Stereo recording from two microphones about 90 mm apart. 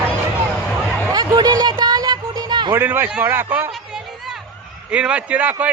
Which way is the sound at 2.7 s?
25° right (ahead or behind).